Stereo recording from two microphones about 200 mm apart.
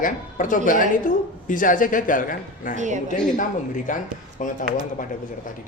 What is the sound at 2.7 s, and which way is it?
Speech, 35° right (ahead or behind).